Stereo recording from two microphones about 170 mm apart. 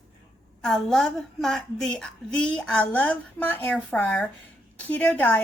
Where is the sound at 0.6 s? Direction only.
5° left (ahead or behind).